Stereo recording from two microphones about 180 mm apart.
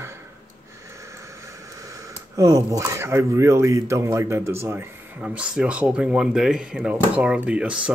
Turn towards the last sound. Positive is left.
turn(degrees=-5)  # may be behind; listen again after turning